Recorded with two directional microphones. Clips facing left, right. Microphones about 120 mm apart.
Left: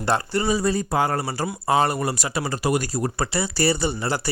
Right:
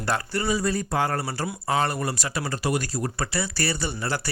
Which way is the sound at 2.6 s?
10° left (ahead or behind).